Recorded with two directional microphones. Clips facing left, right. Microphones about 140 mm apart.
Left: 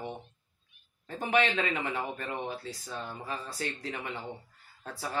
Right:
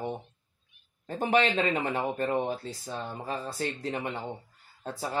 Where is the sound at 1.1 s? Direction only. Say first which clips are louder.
Right 5 dB; 40° right (ahead or behind).